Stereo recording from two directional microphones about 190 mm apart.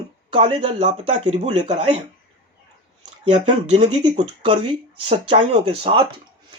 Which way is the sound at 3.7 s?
30° right (ahead or behind).